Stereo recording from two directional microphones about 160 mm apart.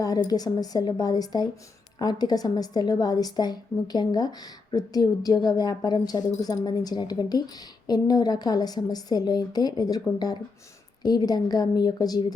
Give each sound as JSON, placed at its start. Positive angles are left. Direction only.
{"t": 0.0, "sound": "a woman's voice", "side_deg": 25}